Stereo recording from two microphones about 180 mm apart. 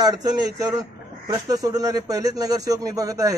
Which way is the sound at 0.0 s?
20° right (ahead or behind).